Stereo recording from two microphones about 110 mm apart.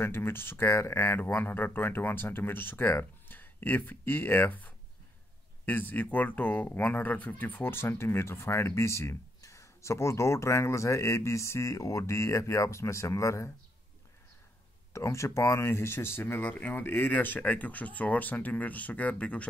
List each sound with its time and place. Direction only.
0.0 s speech: 20° left (ahead or behind)
14.9 s speech: 25° left (ahead or behind)